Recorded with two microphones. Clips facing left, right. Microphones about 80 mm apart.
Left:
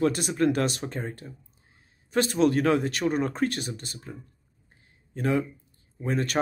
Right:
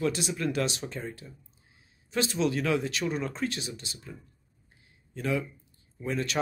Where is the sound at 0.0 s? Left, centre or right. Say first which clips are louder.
Left 6 dB; left.